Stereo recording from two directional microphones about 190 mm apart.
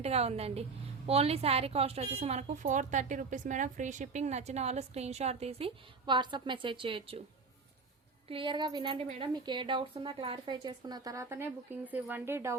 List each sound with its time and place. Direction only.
0.0 s a woman's voice: 35° right (ahead or behind)
8.3 s speech: 25° right (ahead or behind)